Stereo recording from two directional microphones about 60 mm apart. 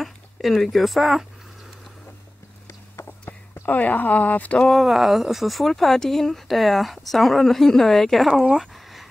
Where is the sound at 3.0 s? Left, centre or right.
Left.